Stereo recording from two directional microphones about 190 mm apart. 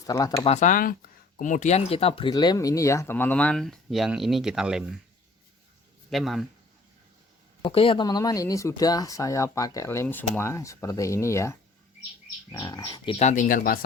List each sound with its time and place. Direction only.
0.1 s speech: 20° left (ahead or behind)
0.4 s speech: 40° left (ahead or behind); by 4.9 s 5° right (ahead or behind)
6.1 s a man's voice: centre (ahead or behind)
7.6 s speech: 30° left (ahead or behind)
13.1 s speech: 40° left (ahead or behind)